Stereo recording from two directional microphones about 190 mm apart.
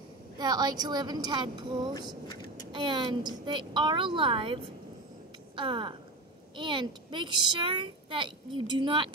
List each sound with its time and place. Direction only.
0.4 s a woman's voice: 20° right (ahead or behind)
5.6 s a woman's voice: 25° right (ahead or behind)